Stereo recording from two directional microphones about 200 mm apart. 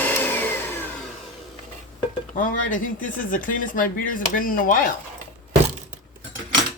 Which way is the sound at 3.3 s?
45° left (ahead or behind).